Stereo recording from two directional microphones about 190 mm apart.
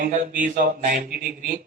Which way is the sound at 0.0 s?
45° right (ahead or behind).